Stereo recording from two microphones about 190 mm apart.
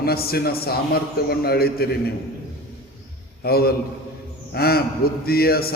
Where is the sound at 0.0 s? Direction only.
55° left (ahead or behind).